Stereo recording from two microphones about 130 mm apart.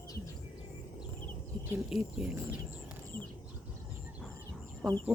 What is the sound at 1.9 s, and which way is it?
Speech, 5° right (ahead or behind).